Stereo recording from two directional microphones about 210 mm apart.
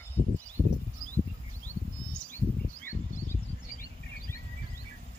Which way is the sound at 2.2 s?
5° left (ahead or behind).